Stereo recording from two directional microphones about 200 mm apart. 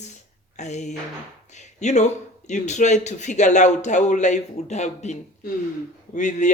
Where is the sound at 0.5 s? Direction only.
35° left (ahead or behind).